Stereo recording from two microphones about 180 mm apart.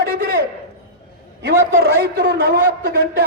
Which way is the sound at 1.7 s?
60° right (ahead or behind).